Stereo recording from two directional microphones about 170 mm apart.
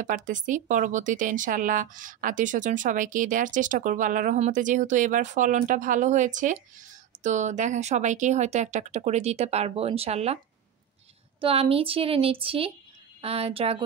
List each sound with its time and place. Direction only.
0.0 s speech: 50° right (ahead or behind)
11.4 s speech: 35° right (ahead or behind)